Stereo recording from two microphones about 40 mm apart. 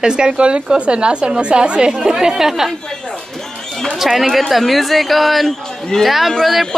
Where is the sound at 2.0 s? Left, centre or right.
Centre.